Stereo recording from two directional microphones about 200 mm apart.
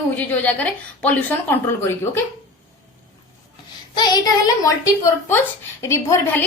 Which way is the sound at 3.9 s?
20° left (ahead or behind).